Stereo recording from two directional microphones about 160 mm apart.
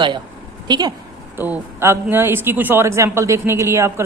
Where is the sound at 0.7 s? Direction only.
25° right (ahead or behind).